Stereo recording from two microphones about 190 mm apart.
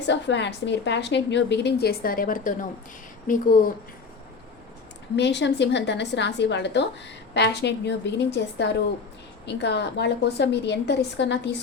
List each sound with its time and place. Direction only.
0.1 s a woman's voice: 70° left (ahead or behind); by 2.6 s 45° left (ahead or behind)
5.1 s a woman's voice: 65° left (ahead or behind)